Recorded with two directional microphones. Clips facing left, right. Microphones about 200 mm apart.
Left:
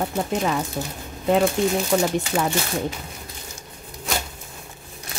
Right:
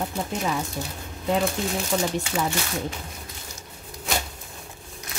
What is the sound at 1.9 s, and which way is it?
Speech, 50° left (ahead or behind).